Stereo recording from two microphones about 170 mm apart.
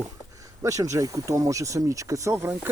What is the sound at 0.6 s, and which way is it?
Speech, 20° right (ahead or behind).